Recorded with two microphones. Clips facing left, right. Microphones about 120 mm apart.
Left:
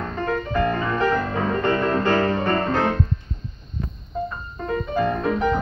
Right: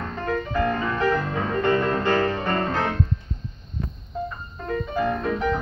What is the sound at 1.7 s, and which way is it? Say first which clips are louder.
Music: even; 5° right (ahead or behind).